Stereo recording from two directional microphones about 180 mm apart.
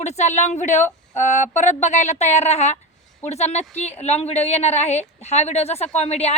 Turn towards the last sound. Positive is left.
turn(degrees=35)  # may be behind; listen again after turning